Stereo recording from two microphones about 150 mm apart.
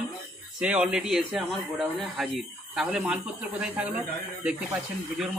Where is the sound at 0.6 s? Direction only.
5° right (ahead or behind).